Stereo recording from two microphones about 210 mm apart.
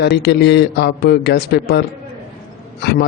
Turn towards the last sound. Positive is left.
turn(degrees=50)  # may be behind; listen again after turning